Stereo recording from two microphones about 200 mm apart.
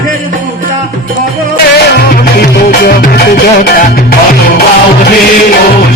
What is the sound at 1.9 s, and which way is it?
Music, 50° left (ahead or behind).